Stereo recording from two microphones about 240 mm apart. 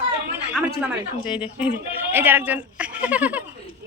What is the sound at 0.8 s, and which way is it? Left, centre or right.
A child's voice, centre.